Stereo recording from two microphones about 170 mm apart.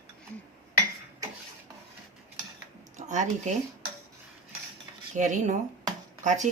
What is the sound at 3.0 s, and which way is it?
Speech, 45° right (ahead or behind).